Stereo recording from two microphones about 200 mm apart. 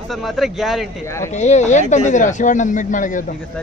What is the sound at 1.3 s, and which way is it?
A man's voice, 35° left (ahead or behind).